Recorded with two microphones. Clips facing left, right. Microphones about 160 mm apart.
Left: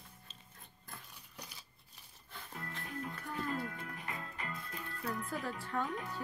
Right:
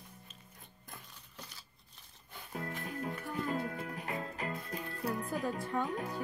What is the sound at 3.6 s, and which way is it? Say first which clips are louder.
Music: right 4 dB; 40° right (ahead or behind).